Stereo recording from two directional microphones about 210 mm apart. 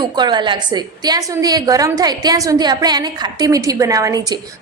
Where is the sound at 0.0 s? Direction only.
20° right (ahead or behind).